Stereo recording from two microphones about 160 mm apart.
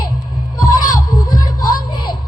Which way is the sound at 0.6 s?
25° left (ahead or behind).